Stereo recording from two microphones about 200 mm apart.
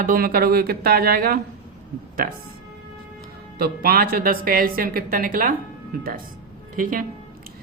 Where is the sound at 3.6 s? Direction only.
50° right (ahead or behind).